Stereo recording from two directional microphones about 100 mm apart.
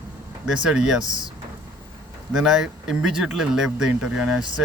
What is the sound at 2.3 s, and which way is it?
Speech, 5° right (ahead or behind).